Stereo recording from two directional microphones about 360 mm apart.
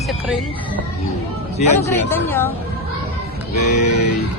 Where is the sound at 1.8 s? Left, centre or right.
Centre.